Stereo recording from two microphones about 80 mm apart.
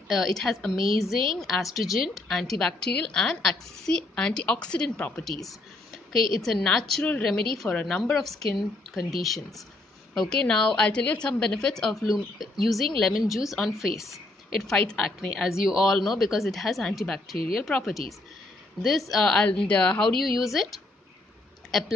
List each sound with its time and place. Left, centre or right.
0.1 s a woman's voice: centre
6.4 s a woman's voice: centre
14.7 s a woman's voice: centre
15.3 s speech: centre
19.3 s a woman's voice: centre
21.6 s speech: centre